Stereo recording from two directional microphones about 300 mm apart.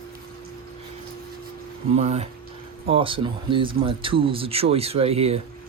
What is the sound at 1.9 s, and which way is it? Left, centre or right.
Speech, right.